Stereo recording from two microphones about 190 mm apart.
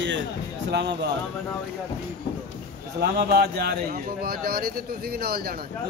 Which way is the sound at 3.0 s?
55° right (ahead or behind).